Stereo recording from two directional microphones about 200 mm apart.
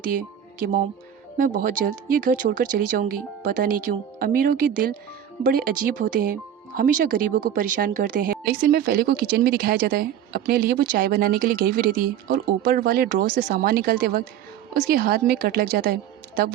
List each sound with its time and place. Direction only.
1.4 s speech: 45° right (ahead or behind)